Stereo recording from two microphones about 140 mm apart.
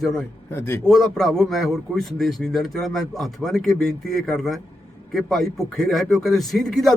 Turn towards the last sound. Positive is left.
turn(degrees=0)  # may be behind; listen again after turning